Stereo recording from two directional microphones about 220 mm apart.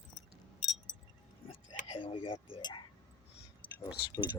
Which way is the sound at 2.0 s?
25° left (ahead or behind).